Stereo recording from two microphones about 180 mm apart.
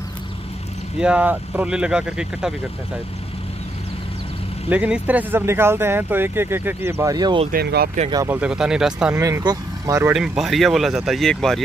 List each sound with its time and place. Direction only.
0.9 s speech: 5° right (ahead or behind)
4.6 s speech: 10° right (ahead or behind); by 7.4 s 25° right (ahead or behind)
7.5 s speech: 60° right (ahead or behind)
8.3 s speech: 5° right (ahead or behind)
9.2 s speech: 20° right (ahead or behind)
10.1 s speech: centre (ahead or behind)